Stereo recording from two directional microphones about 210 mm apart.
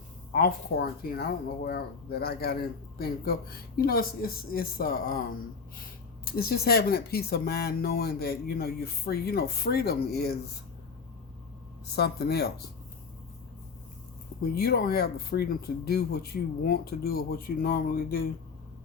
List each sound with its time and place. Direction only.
0.3 s speech: 45° left (ahead or behind)
11.9 s speech: 50° left (ahead or behind)
14.5 s speech: 45° left (ahead or behind)